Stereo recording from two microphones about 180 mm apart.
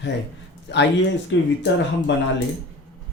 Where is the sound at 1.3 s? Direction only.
90° left.